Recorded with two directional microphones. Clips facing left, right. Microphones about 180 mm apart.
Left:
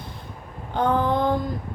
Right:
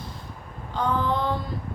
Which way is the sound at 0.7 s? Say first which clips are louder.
Left 4 dB; 55° left (ahead or behind).